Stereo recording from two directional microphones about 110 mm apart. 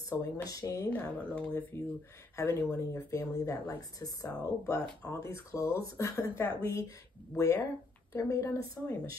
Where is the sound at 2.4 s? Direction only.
30° left (ahead or behind).